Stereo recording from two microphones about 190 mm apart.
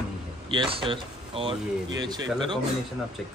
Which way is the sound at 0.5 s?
25° right (ahead or behind).